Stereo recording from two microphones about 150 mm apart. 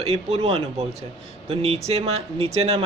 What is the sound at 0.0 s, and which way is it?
Speech, 40° right (ahead or behind).